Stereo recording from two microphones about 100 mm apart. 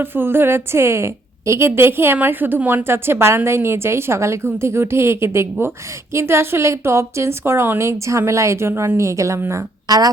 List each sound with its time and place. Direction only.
0.0 s a woman's voice: 20° right (ahead or behind)